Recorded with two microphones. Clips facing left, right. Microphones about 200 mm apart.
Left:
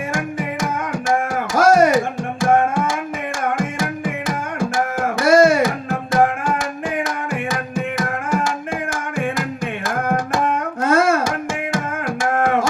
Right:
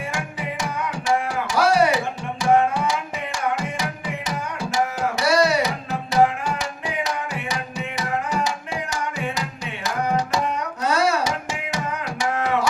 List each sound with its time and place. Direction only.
0.1 s music: 45° left (ahead or behind)